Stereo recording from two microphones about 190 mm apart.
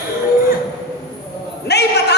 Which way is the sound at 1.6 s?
60° left (ahead or behind).